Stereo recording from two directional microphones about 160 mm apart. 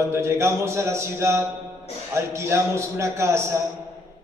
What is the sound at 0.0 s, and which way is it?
A man's voice, 15° right (ahead or behind).